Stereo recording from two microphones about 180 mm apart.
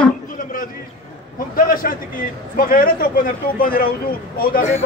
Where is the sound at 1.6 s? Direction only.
50° left (ahead or behind).